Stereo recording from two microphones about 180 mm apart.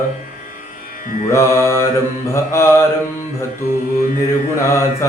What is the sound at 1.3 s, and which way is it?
Music, 15° left (ahead or behind).